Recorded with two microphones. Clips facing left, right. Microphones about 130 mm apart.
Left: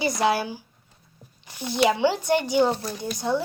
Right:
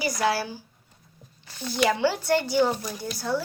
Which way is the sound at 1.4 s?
15° left (ahead or behind).